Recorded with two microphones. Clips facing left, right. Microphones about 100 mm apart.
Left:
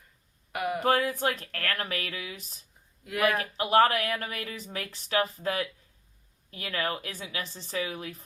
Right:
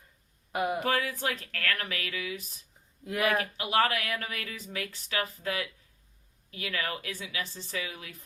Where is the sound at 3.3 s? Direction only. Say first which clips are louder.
Left 4 dB; 35° left (ahead or behind).